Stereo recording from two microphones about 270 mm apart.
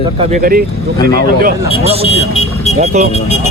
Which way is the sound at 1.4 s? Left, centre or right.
Right.